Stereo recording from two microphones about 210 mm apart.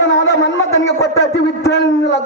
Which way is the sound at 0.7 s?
15° left (ahead or behind).